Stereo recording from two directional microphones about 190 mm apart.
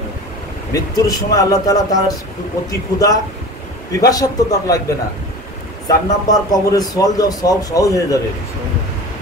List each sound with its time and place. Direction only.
0.7 s a man's voice: 20° left (ahead or behind)
5.9 s a man's voice: 20° left (ahead or behind)